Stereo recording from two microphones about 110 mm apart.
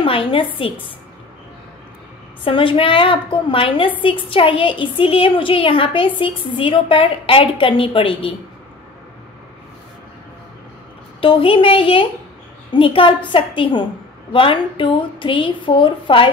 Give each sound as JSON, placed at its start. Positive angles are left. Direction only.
{"t": 0.0, "sound": "a woman's voice", "side_deg": 55}
{"t": 2.4, "sound": "a woman's voice", "side_deg": 50}
{"t": 11.1, "sound": "a woman's voice", "side_deg": 55}